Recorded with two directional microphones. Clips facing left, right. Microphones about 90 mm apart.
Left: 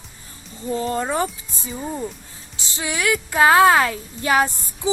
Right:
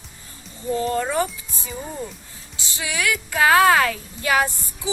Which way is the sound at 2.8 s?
30° left (ahead or behind).